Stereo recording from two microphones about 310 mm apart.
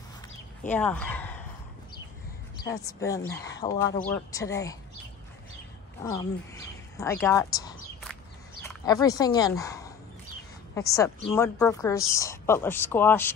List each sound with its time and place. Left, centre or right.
0.7 s speech: centre
2.6 s speech: centre
6.0 s speech: centre
7.0 s a sound: centre
8.6 s a woman's voice: centre